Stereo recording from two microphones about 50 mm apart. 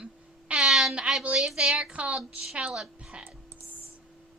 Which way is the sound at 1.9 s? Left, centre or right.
Right.